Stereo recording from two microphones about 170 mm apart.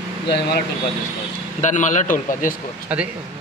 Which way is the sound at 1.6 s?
45° left (ahead or behind).